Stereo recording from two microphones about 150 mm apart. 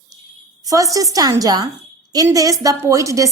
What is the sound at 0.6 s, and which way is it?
A woman's voice, 20° right (ahead or behind).